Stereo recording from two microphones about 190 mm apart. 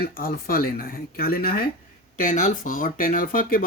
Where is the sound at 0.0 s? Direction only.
50° left (ahead or behind).